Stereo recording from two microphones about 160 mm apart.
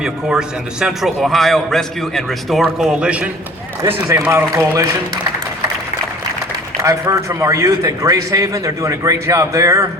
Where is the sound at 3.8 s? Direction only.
15° right (ahead or behind).